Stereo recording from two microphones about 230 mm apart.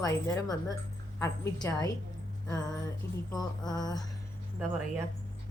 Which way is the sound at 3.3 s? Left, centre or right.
Centre.